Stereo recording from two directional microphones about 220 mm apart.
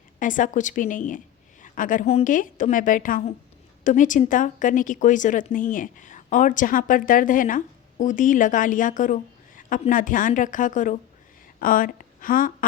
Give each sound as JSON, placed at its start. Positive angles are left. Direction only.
{"t": 0.2, "sound": "a woman's voice", "side_deg": 35}